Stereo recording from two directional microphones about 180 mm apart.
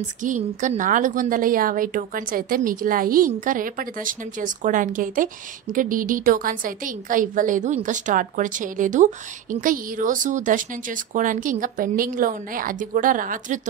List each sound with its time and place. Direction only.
0.2 s a woman's voice: 45° right (ahead or behind)